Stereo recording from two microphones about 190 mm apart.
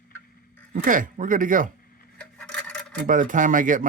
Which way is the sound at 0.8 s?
45° right (ahead or behind).